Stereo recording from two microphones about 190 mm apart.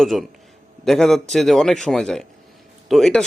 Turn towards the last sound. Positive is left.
turn(degrees=0)  # may be behind; listen again after turning